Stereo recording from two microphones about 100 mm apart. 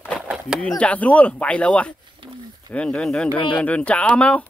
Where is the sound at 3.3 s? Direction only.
55° left (ahead or behind).